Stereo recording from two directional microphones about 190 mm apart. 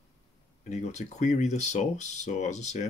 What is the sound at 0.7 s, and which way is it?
Speech, 35° left (ahead or behind).